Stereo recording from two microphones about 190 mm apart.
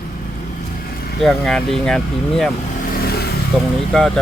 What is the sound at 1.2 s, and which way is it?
Speech, centre (ahead or behind).